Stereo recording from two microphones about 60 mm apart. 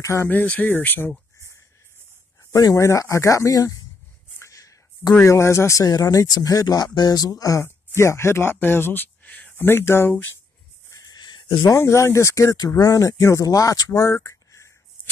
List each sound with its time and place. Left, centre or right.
0.0 s speech: left
0.3 s speech: left
2.5 s speech: left
4.4 s a sound: left
5.2 s speech: left
5.8 s speech: left
7.6 s speech: left
9.7 s speech: left
11.0 s cricket: left
11.8 s speech: left
13.2 s speech: left
13.5 s speech: left
14.1 s a sound: left